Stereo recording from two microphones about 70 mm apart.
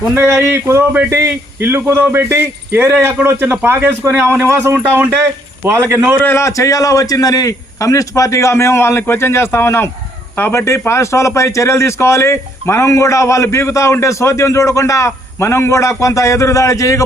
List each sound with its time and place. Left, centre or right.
0.1 s a man's voice: right
6.2 s a man's voice: left